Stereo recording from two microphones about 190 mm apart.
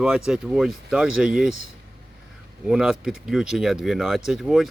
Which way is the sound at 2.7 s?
5° right (ahead or behind).